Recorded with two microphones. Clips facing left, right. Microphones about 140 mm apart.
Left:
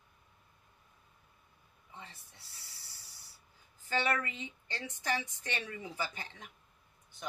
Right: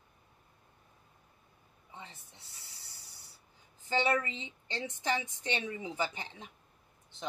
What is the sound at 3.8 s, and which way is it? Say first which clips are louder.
A woman's voice: right 3 dB; 20° right (ahead or behind).